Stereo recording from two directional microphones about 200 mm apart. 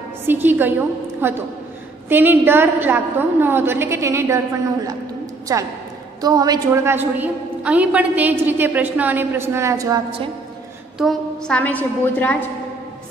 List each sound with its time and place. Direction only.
0.3 s a woman's voice: 10° right (ahead or behind)
4.8 s a sound: 15° right (ahead or behind)
6.2 s a woman's voice: 20° right (ahead or behind)
11.0 s a woman's voice: centre (ahead or behind)